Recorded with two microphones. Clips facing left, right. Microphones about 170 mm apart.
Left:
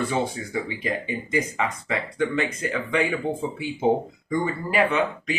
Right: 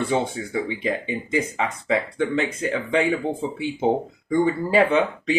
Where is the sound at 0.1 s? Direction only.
25° right (ahead or behind).